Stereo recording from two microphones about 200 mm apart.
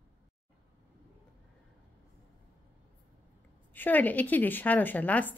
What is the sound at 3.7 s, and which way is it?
Speech, 10° left (ahead or behind).